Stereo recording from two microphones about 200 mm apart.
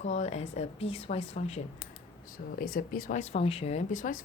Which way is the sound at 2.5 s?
45° left (ahead or behind).